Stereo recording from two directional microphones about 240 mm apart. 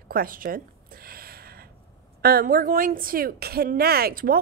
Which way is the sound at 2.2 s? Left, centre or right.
Right.